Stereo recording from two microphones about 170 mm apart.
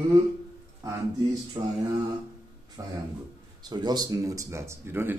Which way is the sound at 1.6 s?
25° right (ahead or behind).